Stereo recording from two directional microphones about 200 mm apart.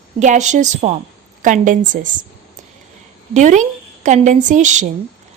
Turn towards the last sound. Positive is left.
turn(degrees=-35)  # may be behind; listen again after turning